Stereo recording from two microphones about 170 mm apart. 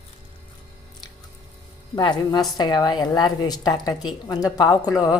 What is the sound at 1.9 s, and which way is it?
A woman's voice, 25° left (ahead or behind).